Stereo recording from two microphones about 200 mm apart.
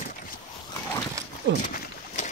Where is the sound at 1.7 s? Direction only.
40° left (ahead or behind).